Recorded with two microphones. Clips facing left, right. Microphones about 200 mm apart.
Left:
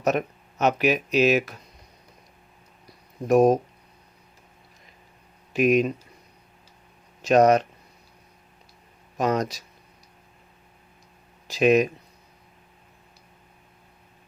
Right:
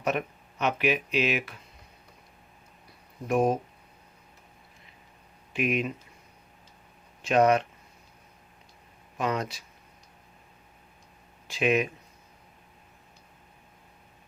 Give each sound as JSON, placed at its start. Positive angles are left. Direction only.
{"t": 0.0, "sound": "speech", "side_deg": 40}
{"t": 2.8, "sound": "a sound", "side_deg": 40}
{"t": 5.5, "sound": "speech", "side_deg": 40}
{"t": 7.2, "sound": "speech", "side_deg": 40}
{"t": 9.1, "sound": "speech", "side_deg": 40}
{"t": 11.4, "sound": "speech", "side_deg": 40}